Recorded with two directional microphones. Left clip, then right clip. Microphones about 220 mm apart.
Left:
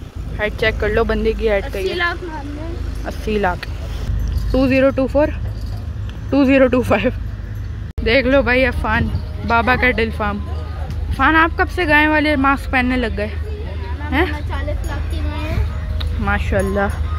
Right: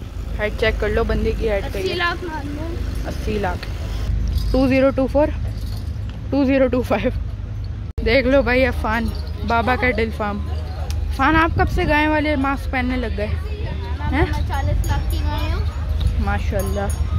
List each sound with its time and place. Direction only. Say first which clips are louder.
0.4 s a woman's voice: left 2 dB; 5° left (ahead or behind)
4.5 s speech: left 2 dB; centre (ahead or behind)
6.3 s a woman's voice: left 4 dB; 10° left (ahead or behind)
16.3 s a woman's voice: left 6 dB; 10° left (ahead or behind)